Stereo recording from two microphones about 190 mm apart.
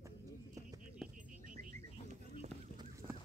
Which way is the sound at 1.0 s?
Centre (ahead or behind).